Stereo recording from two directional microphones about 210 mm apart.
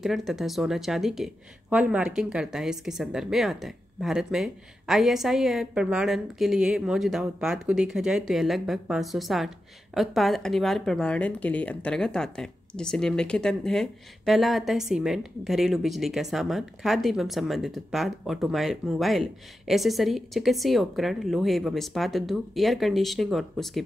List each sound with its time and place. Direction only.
0.0 s speech: centre (ahead or behind)